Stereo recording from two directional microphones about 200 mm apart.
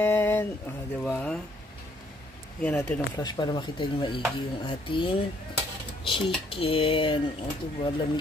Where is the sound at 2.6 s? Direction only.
10° left (ahead or behind); by 5.2 s 25° left (ahead or behind).